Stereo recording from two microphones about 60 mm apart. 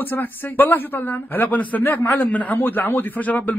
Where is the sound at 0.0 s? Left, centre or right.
Left.